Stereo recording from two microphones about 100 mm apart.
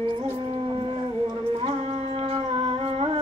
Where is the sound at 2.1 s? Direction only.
65° right (ahead or behind).